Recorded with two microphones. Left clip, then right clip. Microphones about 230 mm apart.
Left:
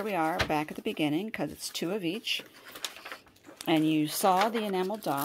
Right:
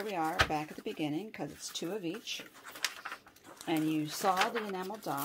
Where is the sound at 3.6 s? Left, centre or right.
Left.